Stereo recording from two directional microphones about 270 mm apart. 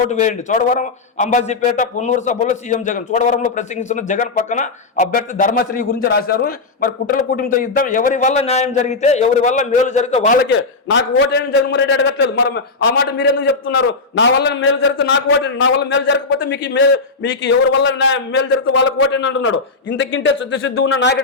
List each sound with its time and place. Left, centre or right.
0.1 s a man's voice: left
10.9 s a man's voice: left